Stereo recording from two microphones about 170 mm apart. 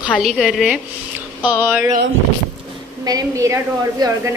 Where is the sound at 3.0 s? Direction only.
20° right (ahead or behind).